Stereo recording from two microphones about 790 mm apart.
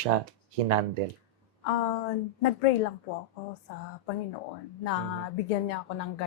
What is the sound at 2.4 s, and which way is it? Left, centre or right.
Speech, left.